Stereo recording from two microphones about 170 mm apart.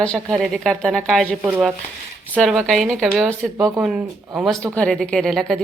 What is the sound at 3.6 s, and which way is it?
Speech, 20° right (ahead or behind).